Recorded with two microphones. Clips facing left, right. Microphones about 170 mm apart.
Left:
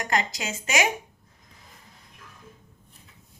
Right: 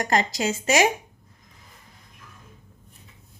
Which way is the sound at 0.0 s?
35° right (ahead or behind).